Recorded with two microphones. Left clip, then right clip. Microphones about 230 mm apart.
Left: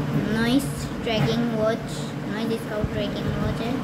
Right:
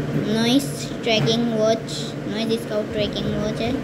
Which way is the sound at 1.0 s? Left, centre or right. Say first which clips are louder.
Right 5 dB; centre.